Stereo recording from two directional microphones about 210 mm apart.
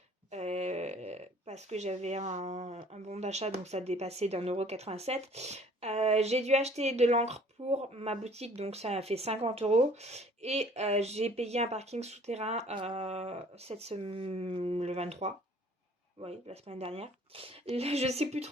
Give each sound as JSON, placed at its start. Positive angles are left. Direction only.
{"t": 0.3, "sound": "speech", "side_deg": -30}